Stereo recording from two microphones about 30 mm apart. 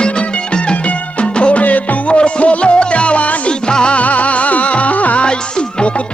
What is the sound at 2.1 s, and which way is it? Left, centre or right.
Music, left.